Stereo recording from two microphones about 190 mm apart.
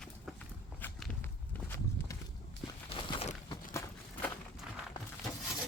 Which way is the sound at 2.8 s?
30° left (ahead or behind).